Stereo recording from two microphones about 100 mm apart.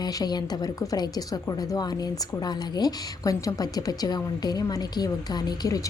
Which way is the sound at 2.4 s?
40° left (ahead or behind).